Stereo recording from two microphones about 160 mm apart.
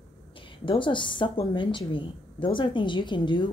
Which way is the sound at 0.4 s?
30° left (ahead or behind).